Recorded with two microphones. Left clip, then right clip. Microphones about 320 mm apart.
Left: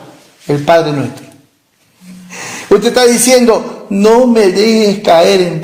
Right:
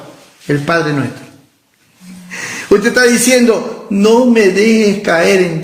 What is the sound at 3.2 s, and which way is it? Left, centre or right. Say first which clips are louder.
Speech: left 2 dB; centre.